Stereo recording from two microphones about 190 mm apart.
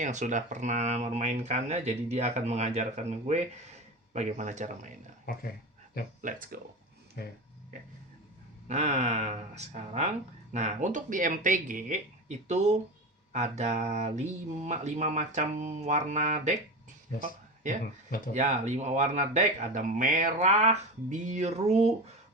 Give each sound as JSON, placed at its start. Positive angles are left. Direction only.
{"t": 0.0, "sound": "speech", "side_deg": -40}
{"t": 5.2, "sound": "speech", "side_deg": 50}
{"t": 6.2, "sound": "speech", "side_deg": -45}
{"t": 8.6, "sound": "speech", "side_deg": -35}
{"t": 17.2, "sound": "a sound", "side_deg": -40}
{"t": 18.3, "sound": "speech", "side_deg": -35}